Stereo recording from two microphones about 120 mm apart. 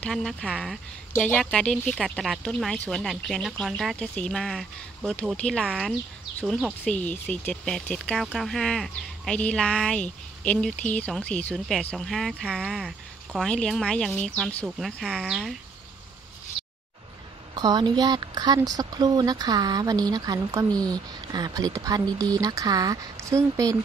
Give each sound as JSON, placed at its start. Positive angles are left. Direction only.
{"t": 0.0, "sound": "speech", "side_deg": 5}
{"t": 12.6, "sound": "speech", "side_deg": -5}
{"t": 13.3, "sound": "speech", "side_deg": 10}
{"t": 17.6, "sound": "speech", "side_deg": -35}